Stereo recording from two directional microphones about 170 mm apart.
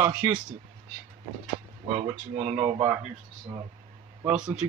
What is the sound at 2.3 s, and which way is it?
Speech, 40° right (ahead or behind).